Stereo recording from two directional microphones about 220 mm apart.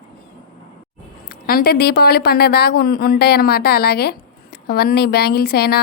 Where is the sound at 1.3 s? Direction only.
40° left (ahead or behind).